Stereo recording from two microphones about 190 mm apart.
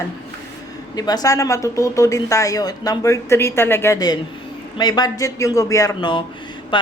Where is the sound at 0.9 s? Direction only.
20° left (ahead or behind).